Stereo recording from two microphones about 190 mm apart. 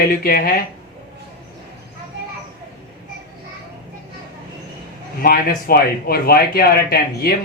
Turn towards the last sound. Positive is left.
turn(degrees=55)  # may be behind; listen again after turning